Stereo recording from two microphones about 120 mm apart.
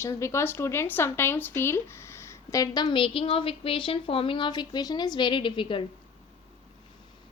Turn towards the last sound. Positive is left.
turn(degrees=45)  # may be behind; listen again after turning